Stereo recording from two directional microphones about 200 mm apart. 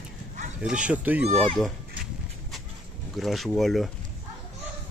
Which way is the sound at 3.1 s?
Centre (ahead or behind).